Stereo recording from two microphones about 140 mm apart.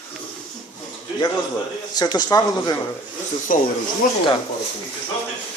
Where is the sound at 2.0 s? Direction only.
30° left (ahead or behind).